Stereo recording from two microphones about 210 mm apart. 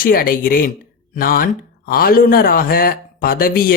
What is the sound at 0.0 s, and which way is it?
A man's voice, 40° left (ahead or behind).